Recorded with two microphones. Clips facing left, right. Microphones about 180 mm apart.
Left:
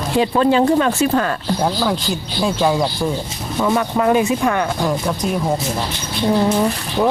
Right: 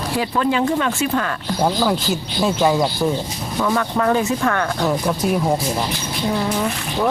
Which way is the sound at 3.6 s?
15° left (ahead or behind).